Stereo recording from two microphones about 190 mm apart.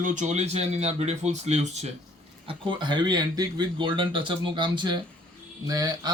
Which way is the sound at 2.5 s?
25° right (ahead or behind).